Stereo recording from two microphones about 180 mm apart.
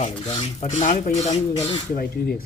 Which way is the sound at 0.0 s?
40° left (ahead or behind).